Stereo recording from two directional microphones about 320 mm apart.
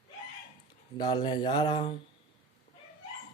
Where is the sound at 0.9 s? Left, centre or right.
Centre.